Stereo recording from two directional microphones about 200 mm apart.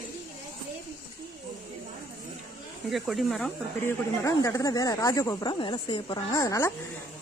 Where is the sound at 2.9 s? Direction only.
Centre (ahead or behind).